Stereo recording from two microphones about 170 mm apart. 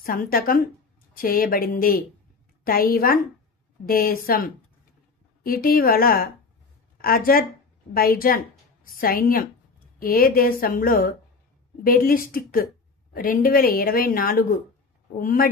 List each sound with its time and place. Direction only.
0.0 s a woman's voice: 55° left (ahead or behind)